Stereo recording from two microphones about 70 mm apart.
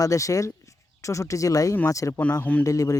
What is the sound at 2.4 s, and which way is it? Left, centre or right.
Speech, left.